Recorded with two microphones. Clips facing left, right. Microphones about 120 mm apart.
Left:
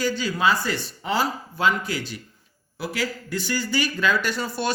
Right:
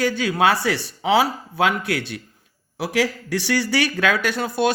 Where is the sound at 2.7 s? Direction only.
90° right.